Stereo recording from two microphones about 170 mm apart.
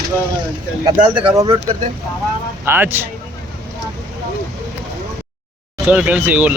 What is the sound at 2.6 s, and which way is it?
Speech, 15° right (ahead or behind).